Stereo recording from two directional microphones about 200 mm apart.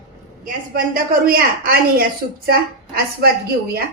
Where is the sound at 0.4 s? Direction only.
45° right (ahead or behind).